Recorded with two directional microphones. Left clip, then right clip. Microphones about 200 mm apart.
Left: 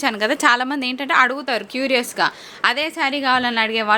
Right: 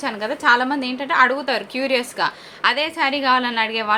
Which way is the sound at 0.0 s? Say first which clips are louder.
Left 3 dB; 45° left (ahead or behind).